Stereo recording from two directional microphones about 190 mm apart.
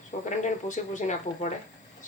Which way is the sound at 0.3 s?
40° left (ahead or behind).